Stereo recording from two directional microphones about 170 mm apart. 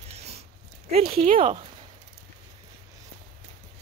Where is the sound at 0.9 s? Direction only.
35° right (ahead or behind).